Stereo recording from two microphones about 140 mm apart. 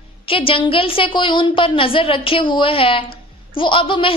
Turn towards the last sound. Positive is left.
turn(degrees=35)  # may be behind; listen again after turning